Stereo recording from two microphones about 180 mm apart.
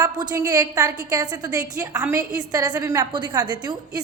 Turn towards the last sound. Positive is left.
turn(degrees=-25)  # may be behind; listen again after turning